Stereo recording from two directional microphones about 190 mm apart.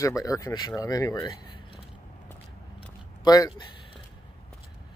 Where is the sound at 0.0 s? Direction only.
15° left (ahead or behind).